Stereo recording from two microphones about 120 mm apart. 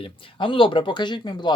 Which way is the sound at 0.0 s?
45° left (ahead or behind).